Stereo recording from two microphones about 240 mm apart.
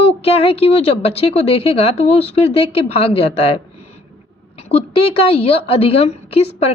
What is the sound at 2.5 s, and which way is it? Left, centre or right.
A woman's voice, left.